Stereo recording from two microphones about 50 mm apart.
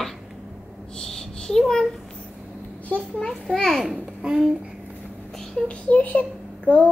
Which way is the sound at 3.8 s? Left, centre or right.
Centre.